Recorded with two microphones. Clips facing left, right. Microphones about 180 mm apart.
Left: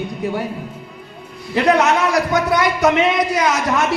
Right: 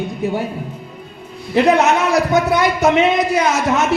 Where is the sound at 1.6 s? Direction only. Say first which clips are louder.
Even; 25° right (ahead or behind).